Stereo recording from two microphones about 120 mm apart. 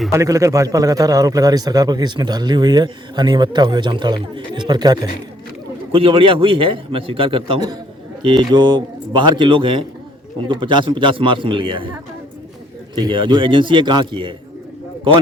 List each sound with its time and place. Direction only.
0.1 s a man's voice: 25° right (ahead or behind)
5.9 s a man's voice: 50° right (ahead or behind)
13.0 s a man's voice: 45° right (ahead or behind)